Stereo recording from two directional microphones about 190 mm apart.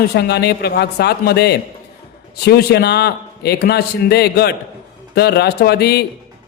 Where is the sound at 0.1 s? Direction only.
60° left (ahead or behind).